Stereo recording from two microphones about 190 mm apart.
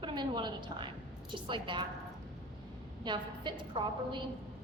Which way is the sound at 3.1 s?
25° right (ahead or behind).